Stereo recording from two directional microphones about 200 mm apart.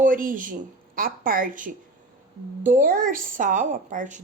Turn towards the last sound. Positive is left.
turn(degrees=-40)  # may be behind; listen again after turning